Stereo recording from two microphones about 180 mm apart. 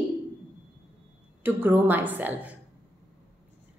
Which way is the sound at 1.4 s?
10° right (ahead or behind).